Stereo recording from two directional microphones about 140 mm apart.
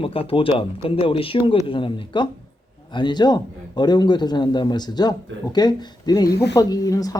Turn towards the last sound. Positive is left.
turn(degrees=25)  # may be behind; listen again after turning